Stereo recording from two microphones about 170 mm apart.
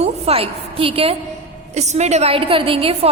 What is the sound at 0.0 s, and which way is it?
A woman's voice, 35° right (ahead or behind).